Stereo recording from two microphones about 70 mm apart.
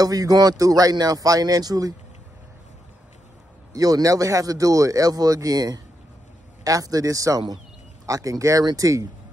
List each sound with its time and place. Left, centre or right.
0.0 s speech: right
3.7 s speech: right